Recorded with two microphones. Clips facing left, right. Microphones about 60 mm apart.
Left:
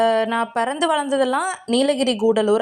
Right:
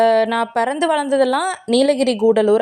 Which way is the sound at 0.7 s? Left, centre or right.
Right.